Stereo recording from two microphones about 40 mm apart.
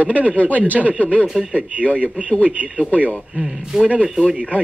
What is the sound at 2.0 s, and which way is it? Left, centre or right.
Speech, right.